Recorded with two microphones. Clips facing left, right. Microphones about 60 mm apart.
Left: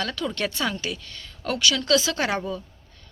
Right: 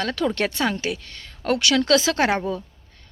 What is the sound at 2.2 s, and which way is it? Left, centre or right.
Speech, right.